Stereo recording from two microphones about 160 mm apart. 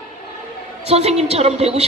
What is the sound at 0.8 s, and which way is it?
A woman's voice, 40° right (ahead or behind).